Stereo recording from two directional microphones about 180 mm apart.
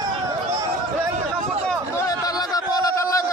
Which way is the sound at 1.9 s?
20° left (ahead or behind).